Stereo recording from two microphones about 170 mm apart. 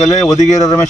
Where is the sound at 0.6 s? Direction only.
20° left (ahead or behind).